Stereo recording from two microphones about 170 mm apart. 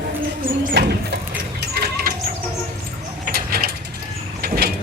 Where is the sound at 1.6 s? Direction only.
70° right (ahead or behind).